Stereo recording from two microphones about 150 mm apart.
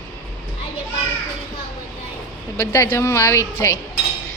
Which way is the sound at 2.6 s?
20° left (ahead or behind).